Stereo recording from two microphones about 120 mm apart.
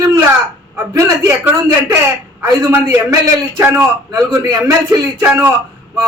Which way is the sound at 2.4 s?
25° right (ahead or behind).